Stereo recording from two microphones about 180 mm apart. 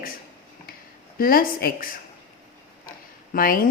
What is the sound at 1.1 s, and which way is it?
Speech, 55° left (ahead or behind).